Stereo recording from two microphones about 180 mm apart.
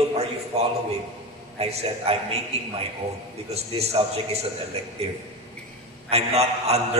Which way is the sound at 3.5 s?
35° right (ahead or behind).